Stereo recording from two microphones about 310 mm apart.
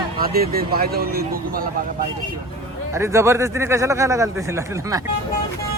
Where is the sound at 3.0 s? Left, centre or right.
Centre.